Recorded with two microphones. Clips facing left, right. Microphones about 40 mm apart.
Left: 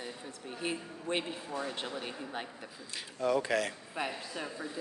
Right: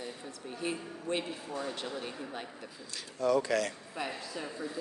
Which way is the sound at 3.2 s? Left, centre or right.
Left.